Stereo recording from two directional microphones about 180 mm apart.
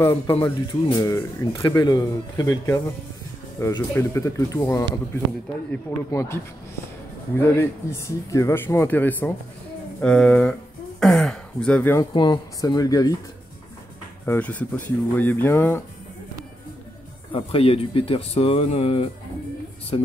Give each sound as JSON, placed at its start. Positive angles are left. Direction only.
{"t": 0.0, "sound": "speech", "side_deg": 15}
{"t": 12.1, "sound": "speech", "side_deg": 25}
{"t": 14.2, "sound": "speech", "side_deg": 10}
{"t": 17.3, "sound": "speech", "side_deg": 30}